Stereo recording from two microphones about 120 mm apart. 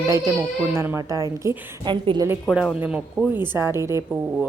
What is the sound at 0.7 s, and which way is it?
Speech, 20° right (ahead or behind).